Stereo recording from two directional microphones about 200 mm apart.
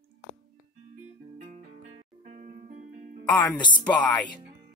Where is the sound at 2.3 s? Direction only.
40° right (ahead or behind).